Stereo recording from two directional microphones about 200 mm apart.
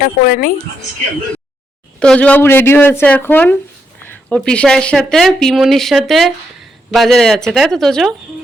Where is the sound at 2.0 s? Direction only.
5° left (ahead or behind).